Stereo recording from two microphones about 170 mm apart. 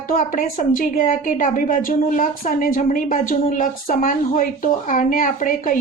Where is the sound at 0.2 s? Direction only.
50° left (ahead or behind).